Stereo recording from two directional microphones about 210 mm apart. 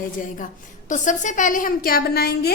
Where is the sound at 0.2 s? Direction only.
40° left (ahead or behind).